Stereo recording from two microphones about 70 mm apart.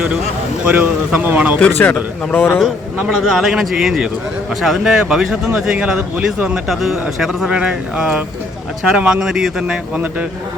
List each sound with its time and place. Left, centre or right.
0.6 s speech: right
1.8 s speech: left
3.1 s speech: centre
6.7 s speech: centre